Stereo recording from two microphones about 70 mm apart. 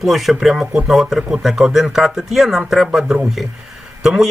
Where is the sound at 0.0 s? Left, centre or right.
Centre.